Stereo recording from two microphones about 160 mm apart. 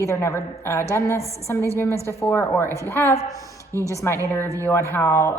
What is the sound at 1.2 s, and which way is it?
Speech, 40° left (ahead or behind).